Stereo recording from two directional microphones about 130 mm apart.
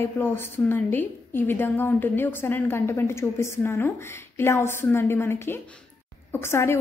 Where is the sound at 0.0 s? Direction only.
15° left (ahead or behind).